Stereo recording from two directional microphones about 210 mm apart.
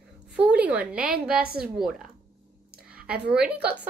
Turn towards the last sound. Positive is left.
turn(degrees=-5)  # may be behind; listen again after turning